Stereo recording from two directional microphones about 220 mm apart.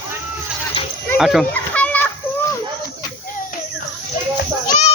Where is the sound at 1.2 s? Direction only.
Centre (ahead or behind).